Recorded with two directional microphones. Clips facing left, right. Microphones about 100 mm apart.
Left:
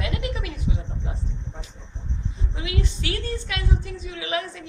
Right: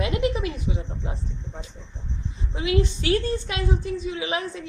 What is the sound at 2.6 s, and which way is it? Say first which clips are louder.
A woman's voice: right 7 dB; 30° right (ahead or behind).